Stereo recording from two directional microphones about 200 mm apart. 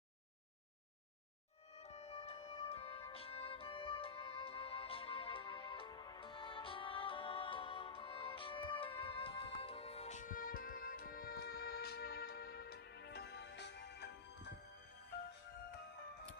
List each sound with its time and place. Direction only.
1.7 s music: 30° left (ahead or behind); by 14.1 s 60° left (ahead or behind)